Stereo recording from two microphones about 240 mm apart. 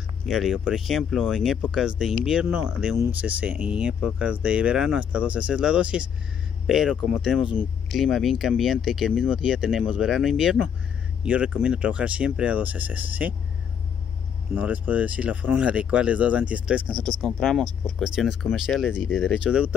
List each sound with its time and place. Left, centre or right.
0.3 s speech: centre
14.5 s speech: centre
16.9 s speech: centre
17.2 s speech: centre